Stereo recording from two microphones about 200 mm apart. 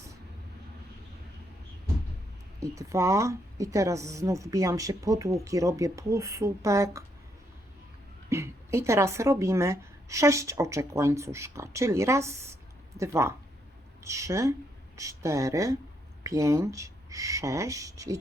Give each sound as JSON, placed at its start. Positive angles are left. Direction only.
{"t": 2.6, "sound": "a woman's voice", "side_deg": -15}
{"t": 8.3, "sound": "a woman's voice", "side_deg": -15}